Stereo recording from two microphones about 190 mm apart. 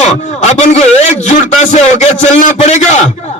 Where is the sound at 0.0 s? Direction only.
40° left (ahead or behind).